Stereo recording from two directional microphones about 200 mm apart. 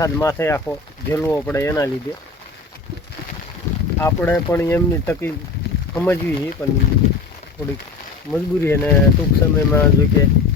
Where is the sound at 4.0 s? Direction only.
10° left (ahead or behind).